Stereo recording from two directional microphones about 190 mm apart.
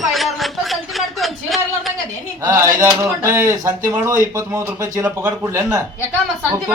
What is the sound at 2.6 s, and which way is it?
Speech, 15° right (ahead or behind).